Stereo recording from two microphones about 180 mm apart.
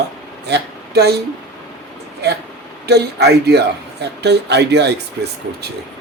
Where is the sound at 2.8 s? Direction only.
65° right (ahead or behind).